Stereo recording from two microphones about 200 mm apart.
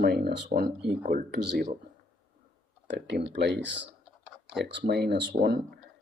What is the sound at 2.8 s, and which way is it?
Speech, 60° right (ahead or behind).